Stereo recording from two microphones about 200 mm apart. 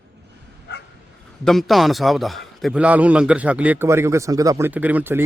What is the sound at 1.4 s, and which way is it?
A man's voice, centre (ahead or behind).